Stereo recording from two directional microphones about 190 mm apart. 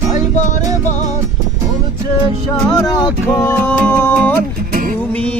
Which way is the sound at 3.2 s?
10° left (ahead or behind).